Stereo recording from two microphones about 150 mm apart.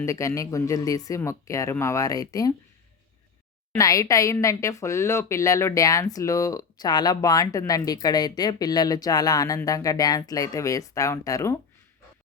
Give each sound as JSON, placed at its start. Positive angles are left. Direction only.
{"t": 0.0, "sound": "speech", "side_deg": 20}
{"t": 3.8, "sound": "speech", "side_deg": 20}